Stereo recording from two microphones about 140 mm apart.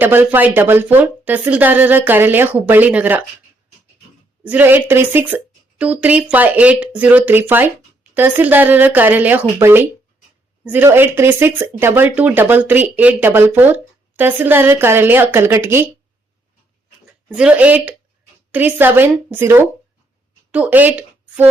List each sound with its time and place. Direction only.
0.0 s speech: 15° right (ahead or behind)
4.4 s speech: 15° right (ahead or behind)
17.2 s speech: 5° right (ahead or behind)